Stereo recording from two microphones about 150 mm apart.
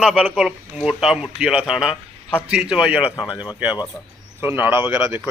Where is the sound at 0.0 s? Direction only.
5° right (ahead or behind).